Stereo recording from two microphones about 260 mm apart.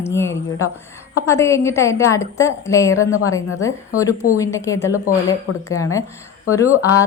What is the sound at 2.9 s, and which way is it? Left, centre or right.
Speech, left.